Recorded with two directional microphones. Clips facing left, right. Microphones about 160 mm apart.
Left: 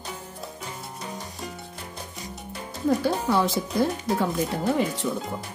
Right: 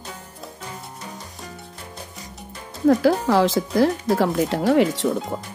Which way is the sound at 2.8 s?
90° right.